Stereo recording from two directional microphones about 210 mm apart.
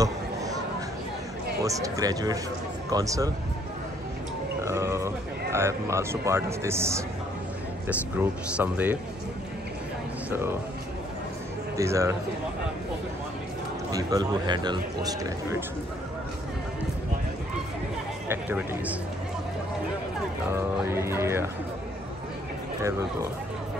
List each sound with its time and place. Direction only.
1.6 s a man's voice: 15° right (ahead or behind)
4.6 s a man's voice: 15° right (ahead or behind)
10.3 s a man's voice: 10° right (ahead or behind)
11.7 s a man's voice: 15° right (ahead or behind)
13.9 s speech: 20° right (ahead or behind)
18.3 s speech: 10° right (ahead or behind)
20.4 s a man's voice: 10° right (ahead or behind)